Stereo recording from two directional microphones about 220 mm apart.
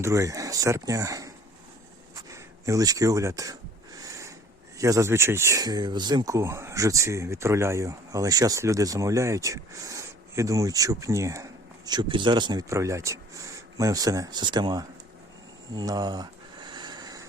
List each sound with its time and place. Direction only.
0.0 s speech: 15° right (ahead or behind)
2.3 s speech: 15° right (ahead or behind)
4.0 s sniff: 15° right (ahead or behind)
4.8 s speech: 15° right (ahead or behind)
15.7 s a sound: 20° right (ahead or behind)